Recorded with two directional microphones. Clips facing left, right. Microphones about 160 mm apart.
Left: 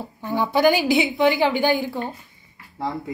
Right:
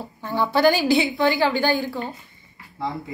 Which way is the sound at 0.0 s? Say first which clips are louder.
Even; 15° left (ahead or behind).